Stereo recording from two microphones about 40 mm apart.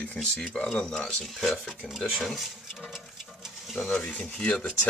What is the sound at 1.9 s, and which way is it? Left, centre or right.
Speech, centre.